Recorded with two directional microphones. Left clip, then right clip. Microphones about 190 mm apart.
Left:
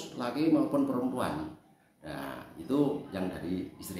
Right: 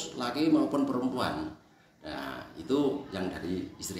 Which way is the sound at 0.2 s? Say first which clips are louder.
Right 1 dB; 10° left (ahead or behind).